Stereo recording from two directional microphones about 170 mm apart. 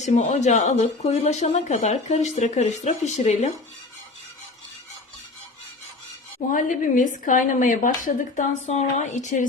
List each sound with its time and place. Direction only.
0.0 s a woman's voice: 40° left (ahead or behind)
6.5 s speech: 50° left (ahead or behind)